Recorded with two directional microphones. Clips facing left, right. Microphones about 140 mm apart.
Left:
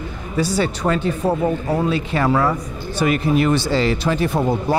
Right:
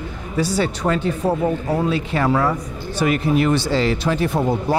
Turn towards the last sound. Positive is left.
turn(degrees=20)  # may be behind; listen again after turning